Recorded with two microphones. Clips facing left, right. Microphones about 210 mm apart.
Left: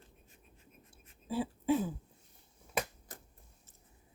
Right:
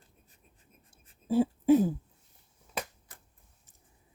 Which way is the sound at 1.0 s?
45° right (ahead or behind).